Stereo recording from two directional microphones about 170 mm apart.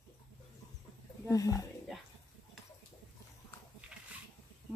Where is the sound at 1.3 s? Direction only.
20° left (ahead or behind).